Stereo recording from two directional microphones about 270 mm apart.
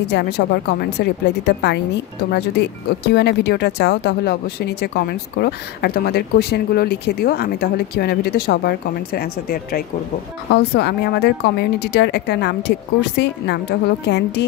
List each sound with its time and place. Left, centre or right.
0.1 s speech: left